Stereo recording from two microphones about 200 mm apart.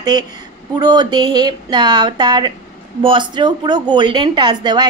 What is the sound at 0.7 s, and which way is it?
Speech, 20° right (ahead or behind).